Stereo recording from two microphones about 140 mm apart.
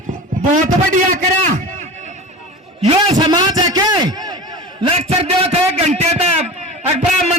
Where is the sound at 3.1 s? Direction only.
30° right (ahead or behind).